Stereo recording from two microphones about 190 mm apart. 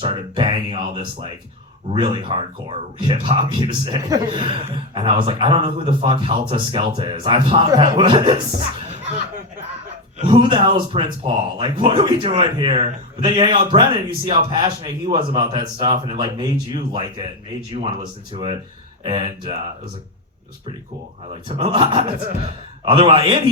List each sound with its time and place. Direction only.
0.0 s speech: 25° right (ahead or behind)
10.2 s speech: 25° right (ahead or behind)
21.4 s speech: 25° right (ahead or behind)